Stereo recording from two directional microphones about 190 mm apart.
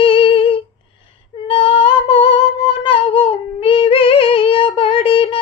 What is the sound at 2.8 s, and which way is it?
Music, 30° left (ahead or behind).